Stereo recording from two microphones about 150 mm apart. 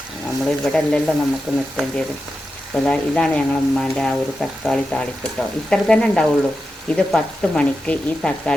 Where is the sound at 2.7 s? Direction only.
5° left (ahead or behind).